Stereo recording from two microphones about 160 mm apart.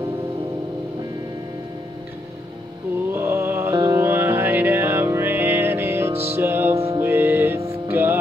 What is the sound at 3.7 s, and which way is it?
Music, 20° right (ahead or behind).